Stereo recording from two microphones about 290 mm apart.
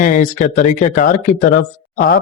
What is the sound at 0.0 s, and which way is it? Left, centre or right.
A man's voice, left.